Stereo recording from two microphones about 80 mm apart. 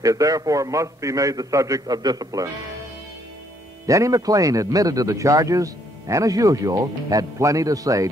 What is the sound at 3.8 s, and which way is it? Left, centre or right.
A man's voice, right.